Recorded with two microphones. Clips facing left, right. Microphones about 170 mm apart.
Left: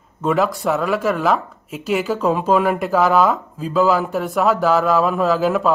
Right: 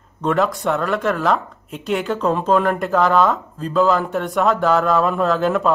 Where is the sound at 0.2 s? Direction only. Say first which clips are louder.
Even; centre (ahead or behind).